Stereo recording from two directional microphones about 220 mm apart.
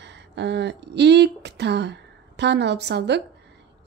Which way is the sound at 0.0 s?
55° right (ahead or behind).